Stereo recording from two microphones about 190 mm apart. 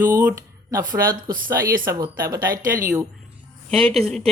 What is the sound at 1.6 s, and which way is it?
Speech, 45° right (ahead or behind).